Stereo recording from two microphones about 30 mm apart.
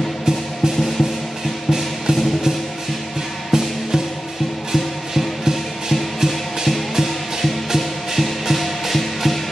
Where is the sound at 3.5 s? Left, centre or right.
Centre.